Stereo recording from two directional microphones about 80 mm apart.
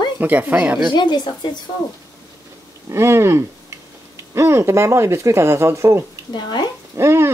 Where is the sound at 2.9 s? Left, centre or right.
Right.